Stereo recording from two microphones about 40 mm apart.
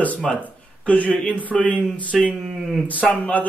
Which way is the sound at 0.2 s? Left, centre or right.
Centre.